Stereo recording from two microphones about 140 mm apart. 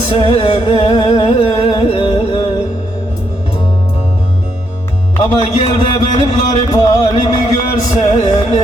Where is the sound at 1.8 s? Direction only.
40° left (ahead or behind).